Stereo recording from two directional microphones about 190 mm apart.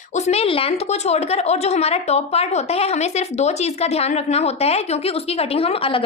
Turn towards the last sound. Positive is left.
turn(degrees=30)  # may be behind; listen again after turning